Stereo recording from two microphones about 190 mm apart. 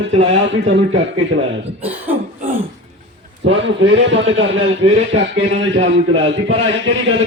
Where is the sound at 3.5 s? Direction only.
70° right (ahead or behind).